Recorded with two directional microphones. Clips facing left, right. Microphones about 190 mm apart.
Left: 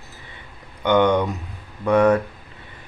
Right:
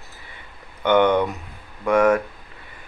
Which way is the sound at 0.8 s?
15° left (ahead or behind).